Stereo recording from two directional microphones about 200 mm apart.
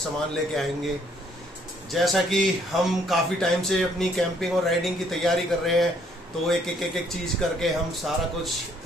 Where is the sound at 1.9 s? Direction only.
Centre (ahead or behind).